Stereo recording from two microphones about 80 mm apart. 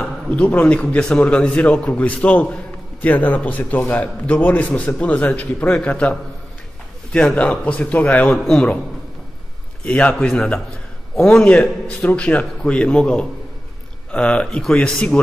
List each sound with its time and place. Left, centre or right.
0.0 s a man's voice: centre
9.8 s a man's voice: centre